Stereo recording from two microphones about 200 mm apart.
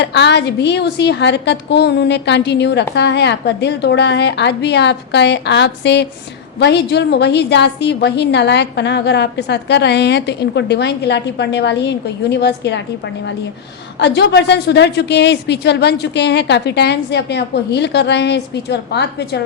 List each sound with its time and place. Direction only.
0.0 s a woman's voice: 60° left (ahead or behind)
14.0 s a woman's voice: 60° left (ahead or behind)